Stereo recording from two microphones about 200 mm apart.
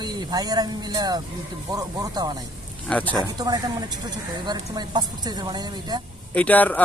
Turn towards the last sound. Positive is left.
turn(degrees=10)  # may be behind; listen again after turning